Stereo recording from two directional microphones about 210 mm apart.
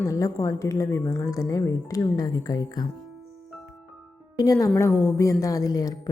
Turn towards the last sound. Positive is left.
turn(degrees=15)  # may be behind; listen again after turning